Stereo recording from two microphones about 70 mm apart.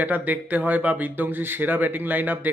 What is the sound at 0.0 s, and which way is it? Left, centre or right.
Speech, right.